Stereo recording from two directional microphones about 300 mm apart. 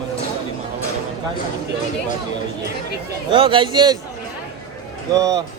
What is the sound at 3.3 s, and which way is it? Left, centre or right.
Speech, centre.